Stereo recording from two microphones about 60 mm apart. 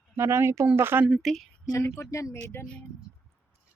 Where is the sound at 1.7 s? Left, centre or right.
Left.